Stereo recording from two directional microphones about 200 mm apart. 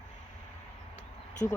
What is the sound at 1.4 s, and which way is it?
Speech, 15° left (ahead or behind).